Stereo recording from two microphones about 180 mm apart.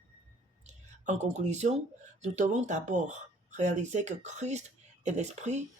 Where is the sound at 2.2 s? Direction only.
40° right (ahead or behind).